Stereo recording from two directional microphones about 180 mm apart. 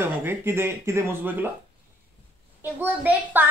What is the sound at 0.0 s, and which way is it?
A child's voice, 10° right (ahead or behind).